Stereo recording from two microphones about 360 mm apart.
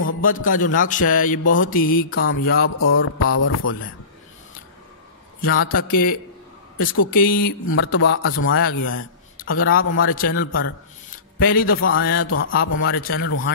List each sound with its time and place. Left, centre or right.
0.0 s a man's voice: left
5.7 s a man's voice: left
7.6 s a man's voice: left